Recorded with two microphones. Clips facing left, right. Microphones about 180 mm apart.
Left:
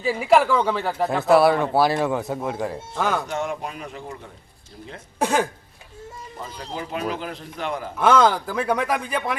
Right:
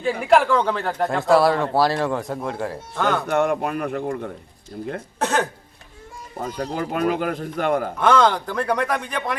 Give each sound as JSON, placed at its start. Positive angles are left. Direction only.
{"t": 0.0, "sound": "speech", "side_deg": 0}
{"t": 3.2, "sound": "speech", "side_deg": -60}
{"t": 5.2, "sound": "speech", "side_deg": 10}
{"t": 6.3, "sound": "speech", "side_deg": -50}
{"t": 7.9, "sound": "speech", "side_deg": 5}